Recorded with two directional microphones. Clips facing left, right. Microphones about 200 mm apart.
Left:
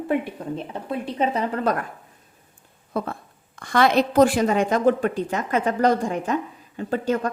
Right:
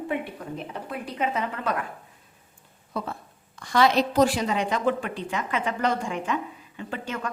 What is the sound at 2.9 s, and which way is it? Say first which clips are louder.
A woman's voice: left 5 dB; 50° left (ahead or behind).